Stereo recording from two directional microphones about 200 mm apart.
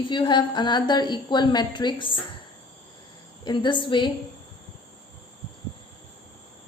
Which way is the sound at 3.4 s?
20° left (ahead or behind).